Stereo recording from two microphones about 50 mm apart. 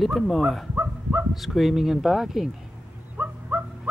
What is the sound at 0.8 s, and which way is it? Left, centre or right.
Dog, right.